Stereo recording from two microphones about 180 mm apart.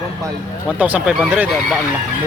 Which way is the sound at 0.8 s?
10° right (ahead or behind).